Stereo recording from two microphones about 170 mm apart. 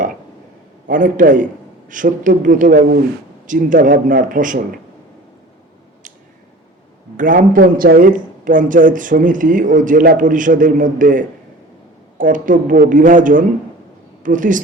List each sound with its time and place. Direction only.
0.9 s a man's voice: 50° right (ahead or behind)
7.2 s a man's voice: 55° right (ahead or behind)